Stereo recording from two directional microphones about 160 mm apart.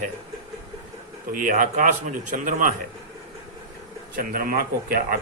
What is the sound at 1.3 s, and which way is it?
Speech, 55° right (ahead or behind).